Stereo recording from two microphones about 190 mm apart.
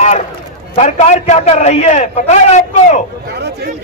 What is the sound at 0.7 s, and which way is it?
A man's voice, 35° left (ahead or behind).